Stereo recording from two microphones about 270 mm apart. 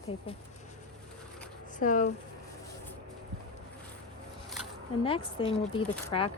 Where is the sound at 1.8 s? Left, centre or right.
Left.